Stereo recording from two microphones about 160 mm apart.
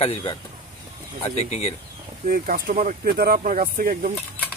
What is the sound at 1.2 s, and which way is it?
Speech, 40° left (ahead or behind).